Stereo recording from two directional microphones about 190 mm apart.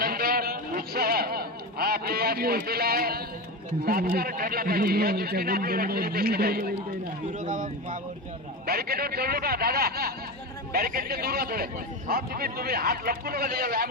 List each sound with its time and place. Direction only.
0.0 s a sound: 50° right (ahead or behind)
3.8 s a man's voice: 50° right (ahead or behind)
7.4 s speech: 40° right (ahead or behind)
8.6 s a man's voice: 55° right (ahead or behind)